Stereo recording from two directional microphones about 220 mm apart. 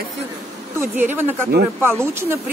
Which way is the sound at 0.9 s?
10° right (ahead or behind).